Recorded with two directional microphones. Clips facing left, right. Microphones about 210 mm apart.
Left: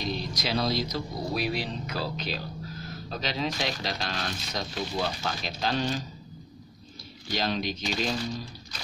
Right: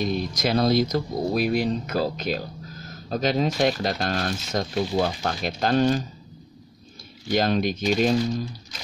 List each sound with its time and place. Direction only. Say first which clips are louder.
0.0 s speech: right 7 dB; 50° right (ahead or behind)
7.2 s speech: right 7 dB; 50° right (ahead or behind)